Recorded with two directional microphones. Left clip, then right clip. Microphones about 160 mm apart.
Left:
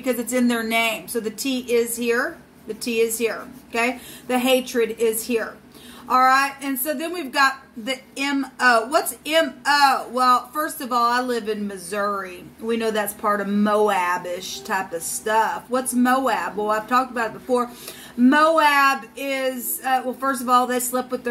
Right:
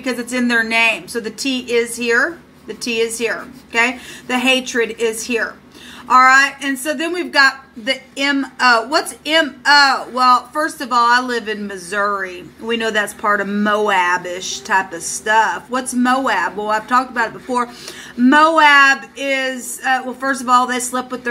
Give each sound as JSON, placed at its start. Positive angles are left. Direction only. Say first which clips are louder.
{"t": 0.0, "sound": "a woman's voice", "louder": "right 2 dB", "side_deg": 25}